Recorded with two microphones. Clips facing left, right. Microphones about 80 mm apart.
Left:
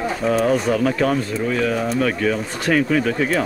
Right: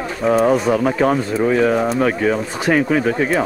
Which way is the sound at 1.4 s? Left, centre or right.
Right.